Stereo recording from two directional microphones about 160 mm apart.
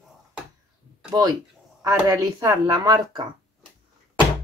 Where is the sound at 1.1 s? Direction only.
25° right (ahead or behind).